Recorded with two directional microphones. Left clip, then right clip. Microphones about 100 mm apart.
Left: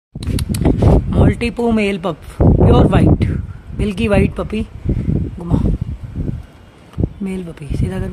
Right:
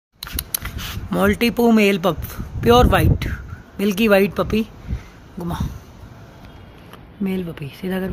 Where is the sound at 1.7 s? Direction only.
10° left (ahead or behind).